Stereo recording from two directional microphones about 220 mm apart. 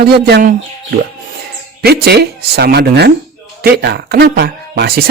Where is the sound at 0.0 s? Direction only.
45° right (ahead or behind).